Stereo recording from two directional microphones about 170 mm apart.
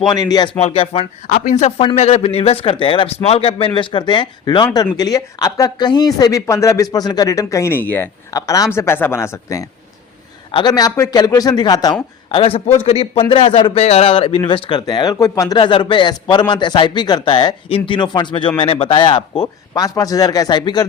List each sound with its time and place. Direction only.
0.1 s a man's voice: 25° left (ahead or behind)
0.6 s a man's voice: 35° left (ahead or behind)